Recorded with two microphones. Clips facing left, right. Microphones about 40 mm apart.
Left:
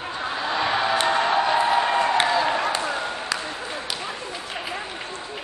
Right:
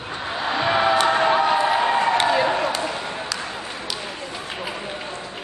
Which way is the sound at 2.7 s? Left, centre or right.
Centre.